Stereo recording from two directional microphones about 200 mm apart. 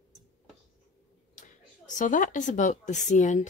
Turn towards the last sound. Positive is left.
turn(degrees=35)  # may be behind; listen again after turning